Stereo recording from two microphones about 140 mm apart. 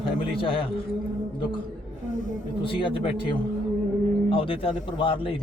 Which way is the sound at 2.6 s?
40° left (ahead or behind).